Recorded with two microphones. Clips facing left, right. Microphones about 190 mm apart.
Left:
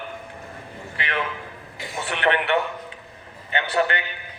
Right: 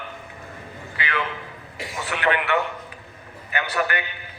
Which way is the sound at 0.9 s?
30° left (ahead or behind).